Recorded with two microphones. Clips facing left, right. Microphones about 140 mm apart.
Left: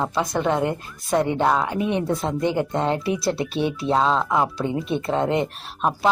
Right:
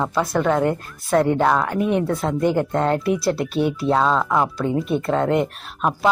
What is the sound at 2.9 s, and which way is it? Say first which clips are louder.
Speech: right 3 dB; centre (ahead or behind).